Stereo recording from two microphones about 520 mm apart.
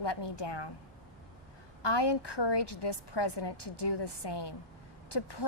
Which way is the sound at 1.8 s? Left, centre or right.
Left.